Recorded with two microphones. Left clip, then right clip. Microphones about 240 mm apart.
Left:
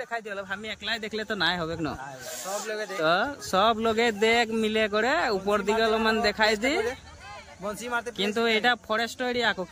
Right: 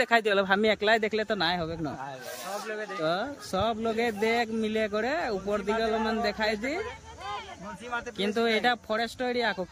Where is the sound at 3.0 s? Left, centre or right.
Centre.